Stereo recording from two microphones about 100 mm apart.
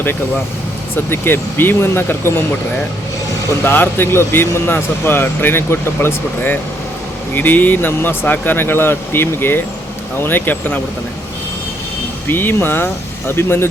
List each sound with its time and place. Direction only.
0.9 s speech: 20° left (ahead or behind)
3.5 s speech: 20° left (ahead or behind)
12.3 s speech: 20° left (ahead or behind)